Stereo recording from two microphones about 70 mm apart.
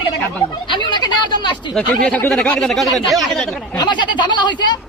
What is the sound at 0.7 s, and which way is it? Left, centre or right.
Speech, left.